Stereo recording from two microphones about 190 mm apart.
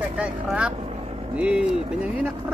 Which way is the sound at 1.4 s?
5° right (ahead or behind).